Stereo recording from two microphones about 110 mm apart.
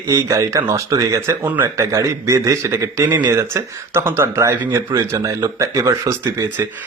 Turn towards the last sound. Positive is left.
turn(degrees=-30)  # may be behind; listen again after turning